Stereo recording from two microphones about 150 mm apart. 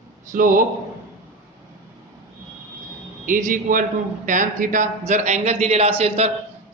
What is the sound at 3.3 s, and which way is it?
A man's voice, 60° right (ahead or behind).